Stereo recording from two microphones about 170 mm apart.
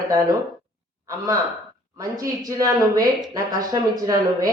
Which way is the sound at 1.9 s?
20° right (ahead or behind).